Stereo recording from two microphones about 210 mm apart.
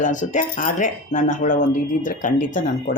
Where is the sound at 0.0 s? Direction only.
35° left (ahead or behind).